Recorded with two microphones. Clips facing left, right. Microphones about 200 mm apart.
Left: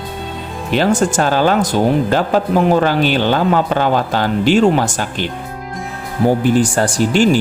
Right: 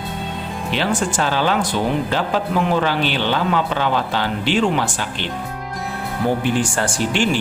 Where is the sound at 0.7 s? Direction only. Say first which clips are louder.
Left 7 dB; 45° left (ahead or behind).